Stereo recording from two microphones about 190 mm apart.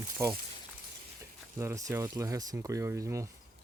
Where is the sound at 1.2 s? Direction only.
15° right (ahead or behind).